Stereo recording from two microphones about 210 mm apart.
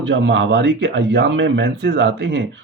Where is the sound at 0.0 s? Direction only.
60° right (ahead or behind).